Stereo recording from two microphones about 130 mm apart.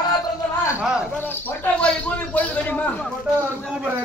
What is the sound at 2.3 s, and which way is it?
Speech, 10° left (ahead or behind).